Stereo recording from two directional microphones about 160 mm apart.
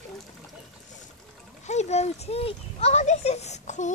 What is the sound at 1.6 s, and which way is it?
Speech, 45° left (ahead or behind).